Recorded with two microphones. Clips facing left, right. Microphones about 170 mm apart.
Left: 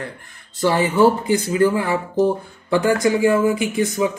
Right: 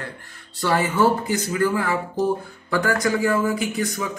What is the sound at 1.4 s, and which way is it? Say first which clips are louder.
Speech: left 3 dB; 20° left (ahead or behind).